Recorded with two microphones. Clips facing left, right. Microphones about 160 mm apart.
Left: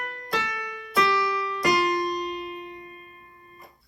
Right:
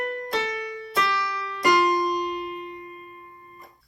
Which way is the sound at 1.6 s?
40° right (ahead or behind).